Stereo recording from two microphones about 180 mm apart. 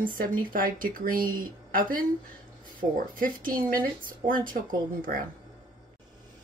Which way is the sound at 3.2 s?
50° right (ahead or behind).